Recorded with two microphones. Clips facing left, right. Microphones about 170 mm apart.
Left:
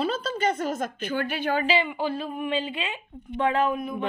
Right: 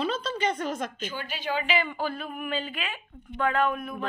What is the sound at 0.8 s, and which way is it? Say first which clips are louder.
Speech: left 6 dB; 60° left (ahead or behind).